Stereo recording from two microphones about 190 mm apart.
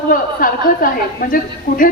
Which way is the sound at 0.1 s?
50° left (ahead or behind).